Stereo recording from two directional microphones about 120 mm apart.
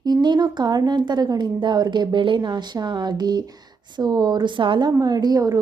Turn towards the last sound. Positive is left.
turn(degrees=-30)  # may be behind; listen again after turning